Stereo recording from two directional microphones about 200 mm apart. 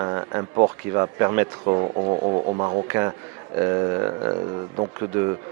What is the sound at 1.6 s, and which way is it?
Speech, 30° right (ahead or behind).